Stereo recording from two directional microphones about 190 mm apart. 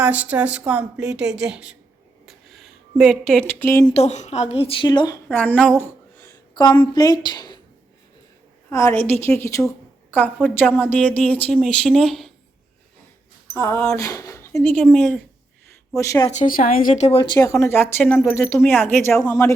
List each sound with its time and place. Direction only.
0.0 s a woman's voice: 5° right (ahead or behind)
2.2 s a sound: centre (ahead or behind)
3.9 s a woman's voice: 35° left (ahead or behind); by 5.7 s 5° left (ahead or behind)
6.1 s a sound: 20° left (ahead or behind)
8.7 s a woman's voice: 15° left (ahead or behind)
13.5 s a woman's voice: 15° left (ahead or behind)
16.4 s a woman's voice: 50° left (ahead or behind)
17.3 s a woman's voice: 15° left (ahead or behind)